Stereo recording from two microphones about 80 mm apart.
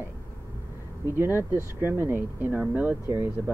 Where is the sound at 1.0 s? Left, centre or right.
Right.